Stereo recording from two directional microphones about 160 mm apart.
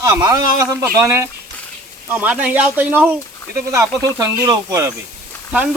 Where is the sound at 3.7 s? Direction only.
20° right (ahead or behind).